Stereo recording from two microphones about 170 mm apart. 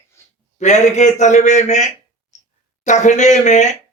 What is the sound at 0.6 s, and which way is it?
Speech, 45° left (ahead or behind).